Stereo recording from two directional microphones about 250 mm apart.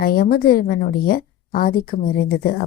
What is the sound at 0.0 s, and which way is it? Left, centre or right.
Speech, left.